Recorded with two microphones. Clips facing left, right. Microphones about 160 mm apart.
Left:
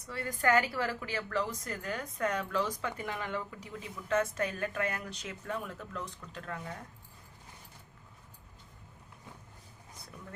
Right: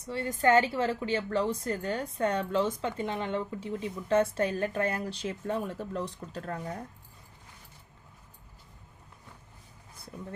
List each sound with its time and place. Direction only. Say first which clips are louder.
0.0 s speech: right 5 dB; 25° right (ahead or behind)